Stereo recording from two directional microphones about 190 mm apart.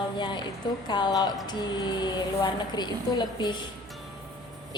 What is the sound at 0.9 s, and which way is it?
A woman's voice, 25° left (ahead or behind).